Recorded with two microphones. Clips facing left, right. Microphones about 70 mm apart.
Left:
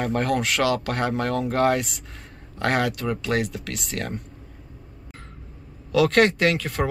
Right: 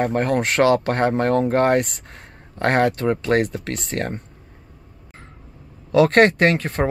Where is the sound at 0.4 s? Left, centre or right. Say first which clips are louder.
Right 6 dB; right.